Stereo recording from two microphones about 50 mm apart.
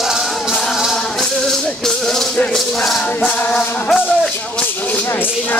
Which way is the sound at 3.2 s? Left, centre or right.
Centre.